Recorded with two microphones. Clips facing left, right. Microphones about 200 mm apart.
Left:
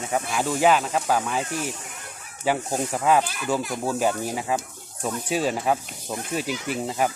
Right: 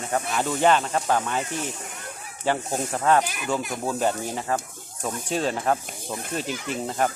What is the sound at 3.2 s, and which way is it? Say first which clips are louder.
Speech: even; 15° right (ahead or behind).